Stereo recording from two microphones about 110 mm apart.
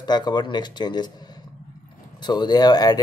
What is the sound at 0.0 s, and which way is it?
Speech, 40° left (ahead or behind).